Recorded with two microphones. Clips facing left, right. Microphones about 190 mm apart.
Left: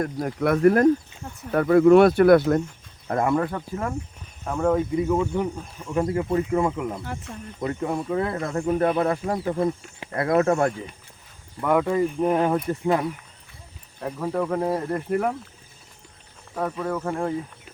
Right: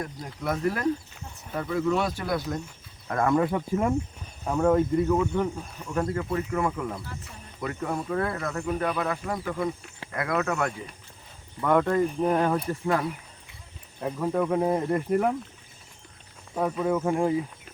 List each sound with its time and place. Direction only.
0.0 s speech: 60° left (ahead or behind)
3.3 s speech: 10° right (ahead or behind)
4.4 s speech: centre (ahead or behind)
4.9 s speech: 15° left (ahead or behind)
6.1 s speech: 20° left (ahead or behind)
11.6 s speech: 5° left (ahead or behind)
14.0 s speech: centre (ahead or behind)
16.6 s speech: 5° right (ahead or behind)